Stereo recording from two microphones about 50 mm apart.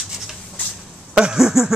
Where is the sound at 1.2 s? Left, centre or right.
Centre.